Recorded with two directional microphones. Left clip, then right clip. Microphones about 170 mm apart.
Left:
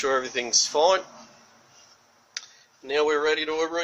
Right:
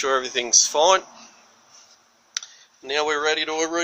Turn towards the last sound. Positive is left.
turn(degrees=-65)  # may be behind; listen again after turning